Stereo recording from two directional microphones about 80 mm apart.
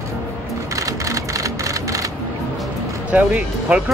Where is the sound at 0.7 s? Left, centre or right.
Right.